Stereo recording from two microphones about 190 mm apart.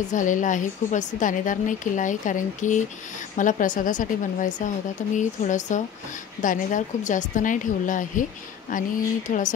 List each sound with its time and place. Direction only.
0.1 s a woman's voice: 45° left (ahead or behind)